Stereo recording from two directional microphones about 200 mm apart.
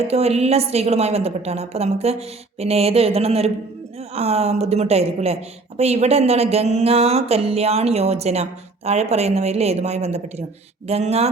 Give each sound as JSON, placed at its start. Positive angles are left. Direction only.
{"t": 0.1, "sound": "a woman's voice", "side_deg": -30}